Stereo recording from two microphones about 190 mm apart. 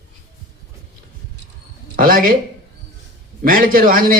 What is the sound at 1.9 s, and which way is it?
Speech, 50° right (ahead or behind).